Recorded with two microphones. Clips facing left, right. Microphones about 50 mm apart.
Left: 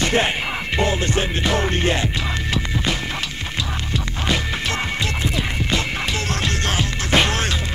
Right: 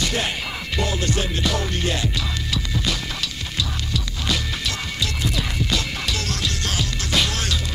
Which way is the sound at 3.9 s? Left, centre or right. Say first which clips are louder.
Left 5 dB; left.